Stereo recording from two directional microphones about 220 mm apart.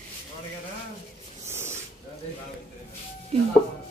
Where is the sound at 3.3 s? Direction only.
30° right (ahead or behind).